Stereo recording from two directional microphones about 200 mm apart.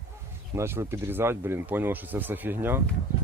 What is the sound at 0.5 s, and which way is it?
Speech, 15° right (ahead or behind).